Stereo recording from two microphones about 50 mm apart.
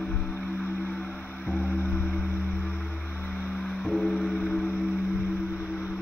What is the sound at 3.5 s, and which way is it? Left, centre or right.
Music, centre.